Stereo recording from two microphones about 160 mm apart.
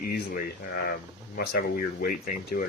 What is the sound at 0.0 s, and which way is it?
Speech, 65° left (ahead or behind).